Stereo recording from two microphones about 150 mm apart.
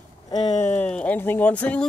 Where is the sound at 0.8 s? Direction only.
10° left (ahead or behind).